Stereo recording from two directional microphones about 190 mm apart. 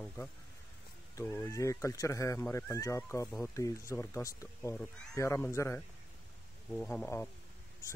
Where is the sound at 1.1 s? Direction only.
15° left (ahead or behind).